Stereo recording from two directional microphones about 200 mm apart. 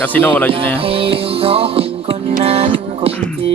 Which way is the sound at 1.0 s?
30° right (ahead or behind).